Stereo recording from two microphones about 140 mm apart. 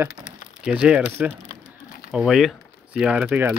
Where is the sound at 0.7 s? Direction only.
5° right (ahead or behind).